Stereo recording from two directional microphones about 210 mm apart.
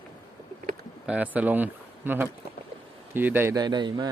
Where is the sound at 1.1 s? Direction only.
5° right (ahead or behind).